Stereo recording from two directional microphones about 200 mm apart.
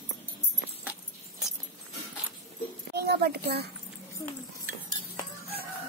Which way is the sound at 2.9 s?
55° right (ahead or behind).